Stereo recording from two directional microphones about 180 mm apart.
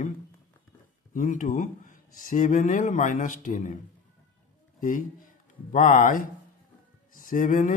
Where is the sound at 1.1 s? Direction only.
45° left (ahead or behind).